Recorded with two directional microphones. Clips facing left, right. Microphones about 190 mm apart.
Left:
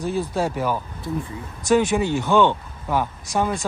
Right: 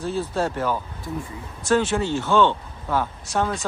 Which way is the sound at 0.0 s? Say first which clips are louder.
Left 1 dB; 15° left (ahead or behind).